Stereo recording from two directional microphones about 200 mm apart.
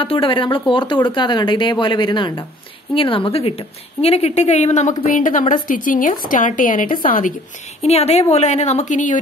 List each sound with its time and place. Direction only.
0.0 s a woman's voice: 25° left (ahead or behind); by 7.3 s 40° left (ahead or behind)
7.8 s a woman's voice: 30° left (ahead or behind)